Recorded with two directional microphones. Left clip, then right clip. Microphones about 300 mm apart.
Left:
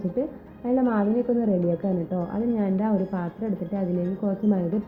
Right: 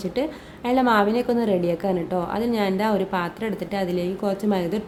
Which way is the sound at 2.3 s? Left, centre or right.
Centre.